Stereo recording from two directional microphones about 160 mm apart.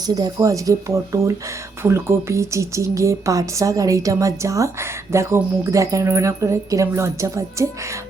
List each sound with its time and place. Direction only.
0.0 s speech: 25° right (ahead or behind)